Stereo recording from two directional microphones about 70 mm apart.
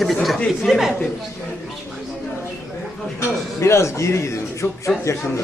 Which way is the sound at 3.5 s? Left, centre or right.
Left.